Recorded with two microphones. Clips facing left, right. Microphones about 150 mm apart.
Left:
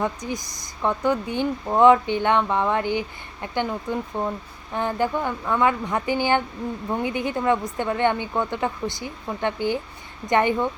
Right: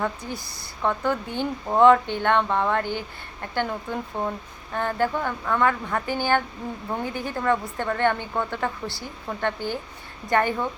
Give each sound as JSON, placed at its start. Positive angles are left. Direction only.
{"t": 0.0, "sound": "a woman's voice", "side_deg": 15}